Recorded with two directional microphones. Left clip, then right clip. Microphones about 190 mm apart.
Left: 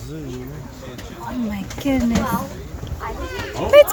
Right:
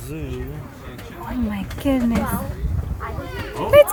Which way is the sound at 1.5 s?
5° right (ahead or behind).